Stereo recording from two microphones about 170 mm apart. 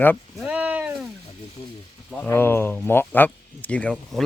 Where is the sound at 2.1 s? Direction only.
10° left (ahead or behind).